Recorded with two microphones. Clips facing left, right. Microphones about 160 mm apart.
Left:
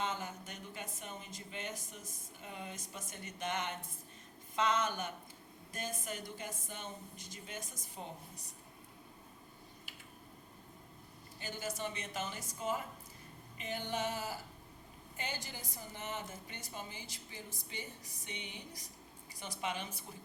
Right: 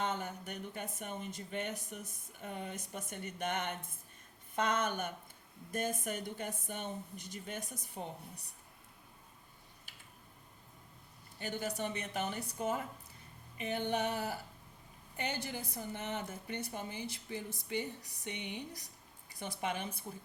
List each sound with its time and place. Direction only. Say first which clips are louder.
0.0 s speech: right 2 dB; 55° right (ahead or behind)
11.3 s speech: right 4 dB; 55° right (ahead or behind)